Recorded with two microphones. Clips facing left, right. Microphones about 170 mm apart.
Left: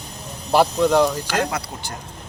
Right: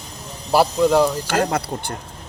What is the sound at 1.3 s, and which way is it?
Speech, 50° right (ahead or behind).